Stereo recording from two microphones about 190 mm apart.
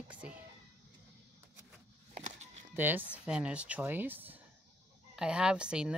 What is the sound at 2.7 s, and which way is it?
Speech, 10° right (ahead or behind).